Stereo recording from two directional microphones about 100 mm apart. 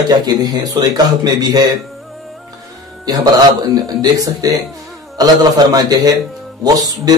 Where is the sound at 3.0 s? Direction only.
40° right (ahead or behind).